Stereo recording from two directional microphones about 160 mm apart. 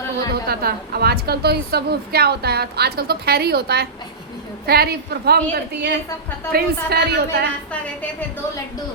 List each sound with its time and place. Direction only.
0.4 s a woman's voice: 75° right (ahead or behind)
4.6 s a woman's voice: 75° right (ahead or behind)